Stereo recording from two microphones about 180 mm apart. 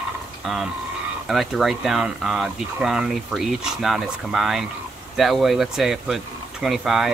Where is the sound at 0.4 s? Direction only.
Centre (ahead or behind).